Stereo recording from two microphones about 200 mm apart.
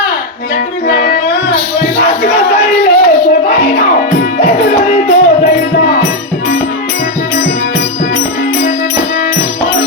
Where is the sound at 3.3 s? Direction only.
40° left (ahead or behind).